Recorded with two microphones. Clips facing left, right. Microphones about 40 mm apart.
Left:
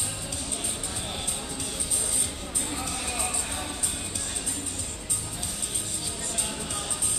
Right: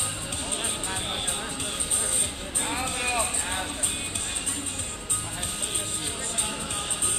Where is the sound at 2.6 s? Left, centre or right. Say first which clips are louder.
Right 6 dB; right.